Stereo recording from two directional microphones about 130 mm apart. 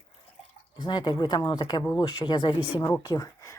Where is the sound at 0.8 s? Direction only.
35° left (ahead or behind).